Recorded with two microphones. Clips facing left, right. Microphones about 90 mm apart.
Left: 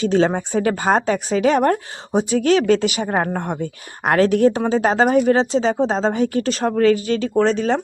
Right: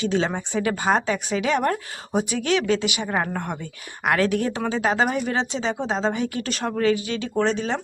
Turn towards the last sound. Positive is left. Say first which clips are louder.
# left 6 dB
turn(degrees=40)  # may be behind; listen again after turning